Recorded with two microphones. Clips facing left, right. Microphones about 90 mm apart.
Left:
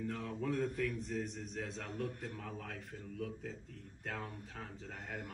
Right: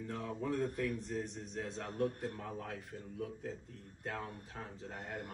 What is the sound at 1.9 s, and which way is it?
Speech, 45° right (ahead or behind).